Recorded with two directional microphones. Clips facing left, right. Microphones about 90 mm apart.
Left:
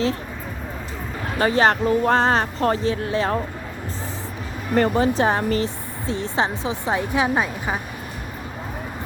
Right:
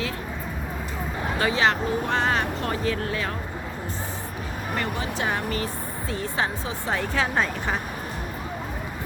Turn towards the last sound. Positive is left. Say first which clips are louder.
# left 3 dB
turn(degrees=10)  # may be behind; listen again after turning